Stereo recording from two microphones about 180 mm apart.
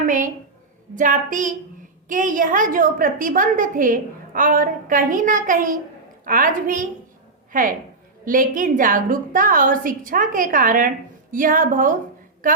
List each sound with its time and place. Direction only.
0.0 s a woman's voice: 45° right (ahead or behind)